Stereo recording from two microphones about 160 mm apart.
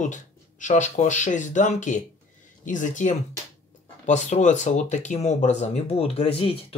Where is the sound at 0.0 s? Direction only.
50° left (ahead or behind).